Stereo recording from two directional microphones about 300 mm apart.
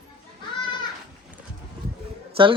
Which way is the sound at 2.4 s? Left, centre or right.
Centre.